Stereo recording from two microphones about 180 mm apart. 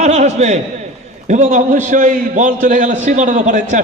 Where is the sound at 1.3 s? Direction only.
45° right (ahead or behind).